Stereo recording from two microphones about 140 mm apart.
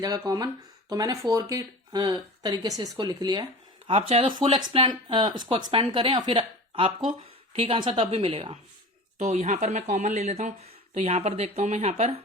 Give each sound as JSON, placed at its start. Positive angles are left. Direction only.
{"t": 0.3, "sound": "speech", "side_deg": -25}
{"t": 3.8, "sound": "speech", "side_deg": -40}
{"t": 9.1, "sound": "speech", "side_deg": -60}